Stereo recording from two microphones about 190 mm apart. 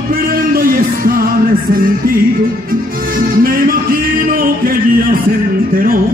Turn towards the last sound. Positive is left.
turn(degrees=-50)  # may be behind; listen again after turning